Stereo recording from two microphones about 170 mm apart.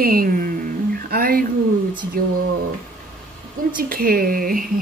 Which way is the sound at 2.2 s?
60° right (ahead or behind).